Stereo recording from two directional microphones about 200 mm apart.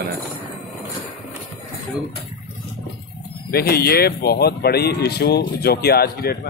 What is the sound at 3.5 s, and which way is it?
Speech, 50° left (ahead or behind).